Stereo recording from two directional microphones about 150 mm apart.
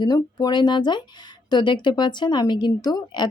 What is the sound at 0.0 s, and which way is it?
Speech, 25° left (ahead or behind).